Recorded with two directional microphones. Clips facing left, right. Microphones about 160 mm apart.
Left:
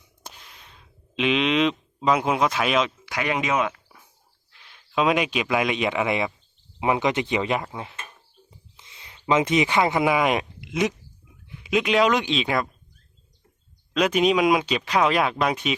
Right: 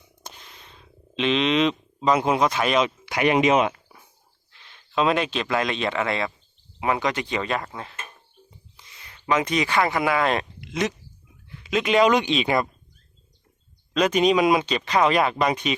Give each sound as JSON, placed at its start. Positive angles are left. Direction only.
{"t": 0.2, "sound": "a sound", "side_deg": 5}
{"t": 3.1, "sound": "speech", "side_deg": -25}
{"t": 4.5, "sound": "speech", "side_deg": 5}
{"t": 11.4, "sound": "a sound", "side_deg": 15}
{"t": 11.8, "sound": "speech", "side_deg": 0}
{"t": 13.9, "sound": "speech", "side_deg": 5}